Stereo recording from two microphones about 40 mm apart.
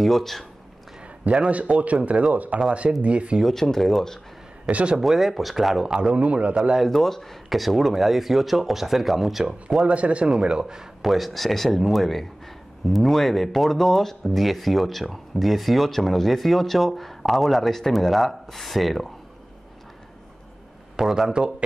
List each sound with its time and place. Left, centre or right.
0.0 s speech: centre
1.2 s speech: right
3.0 s speech: right
3.5 s speech: centre
4.6 s speech: right
5.0 s speech: centre
5.9 s speech: centre
6.1 s speech: right
6.8 s speech: centre
9.8 s speech: right
10.2 s speech: right
11.1 s speech: centre
21.3 s speech: right